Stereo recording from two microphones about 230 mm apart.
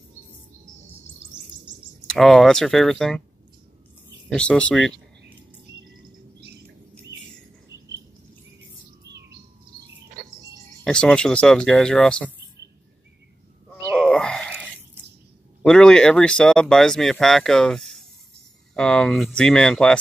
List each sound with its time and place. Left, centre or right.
2.0 s speech: centre
4.3 s speech: centre
10.8 s speech: centre
13.9 s a sound: centre
15.6 s speech: centre